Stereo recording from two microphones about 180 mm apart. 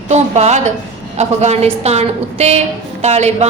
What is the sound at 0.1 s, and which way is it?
A woman's voice, 40° right (ahead or behind).